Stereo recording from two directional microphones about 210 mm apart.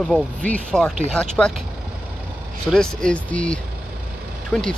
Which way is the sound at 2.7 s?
5° left (ahead or behind).